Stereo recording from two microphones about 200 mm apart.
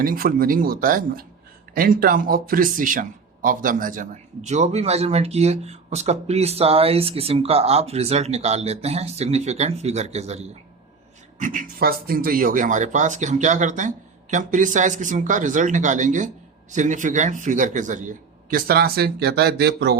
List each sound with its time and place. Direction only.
0.0 s speech: 45° right (ahead or behind)